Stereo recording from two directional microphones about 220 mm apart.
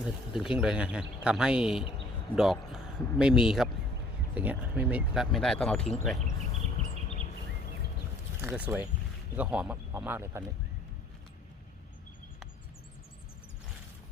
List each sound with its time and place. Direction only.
0.3 s speech: 5° right (ahead or behind)
6.8 s insect: 25° right (ahead or behind)
8.4 s speech: 5° right (ahead or behind)